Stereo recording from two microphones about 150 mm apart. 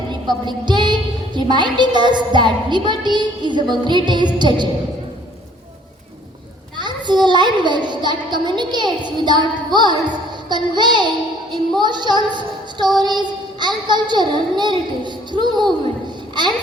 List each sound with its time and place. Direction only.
0.3 s a woman's voice: 30° right (ahead or behind)
6.7 s a child's voice: 30° right (ahead or behind)